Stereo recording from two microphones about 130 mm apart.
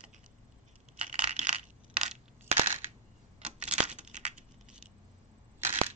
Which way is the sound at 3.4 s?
60° right (ahead or behind).